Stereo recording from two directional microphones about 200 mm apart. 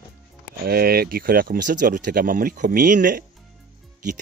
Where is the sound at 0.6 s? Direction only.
50° right (ahead or behind).